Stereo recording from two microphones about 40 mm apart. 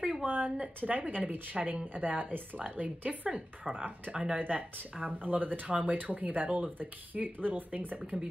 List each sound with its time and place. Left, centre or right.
0.2 s a woman's voice: right
1.6 s speech: centre
2.0 s a woman's voice: right
4.4 s speech: right
5.2 s a woman's voice: right
5.7 s a woman's voice: right